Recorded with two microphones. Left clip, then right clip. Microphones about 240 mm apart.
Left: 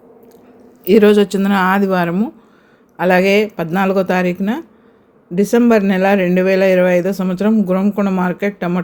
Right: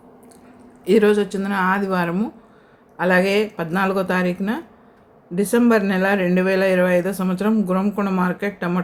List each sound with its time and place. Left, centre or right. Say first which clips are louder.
0.9 s speech: left 6 dB; left